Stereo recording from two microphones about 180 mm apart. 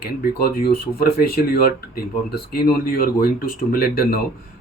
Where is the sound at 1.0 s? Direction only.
60° left (ahead or behind).